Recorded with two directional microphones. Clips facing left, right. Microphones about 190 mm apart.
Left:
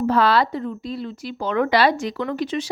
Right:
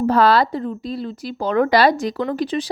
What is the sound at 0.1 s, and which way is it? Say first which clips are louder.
A woman's voice: right 3 dB; 40° right (ahead or behind).